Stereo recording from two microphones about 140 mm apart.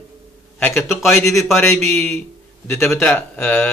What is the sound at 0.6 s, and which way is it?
Speech, 10° left (ahead or behind).